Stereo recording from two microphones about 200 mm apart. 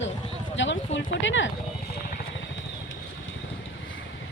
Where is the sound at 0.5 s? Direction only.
65° left (ahead or behind).